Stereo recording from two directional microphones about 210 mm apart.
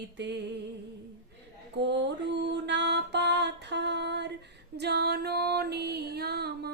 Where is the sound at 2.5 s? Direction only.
55° right (ahead or behind).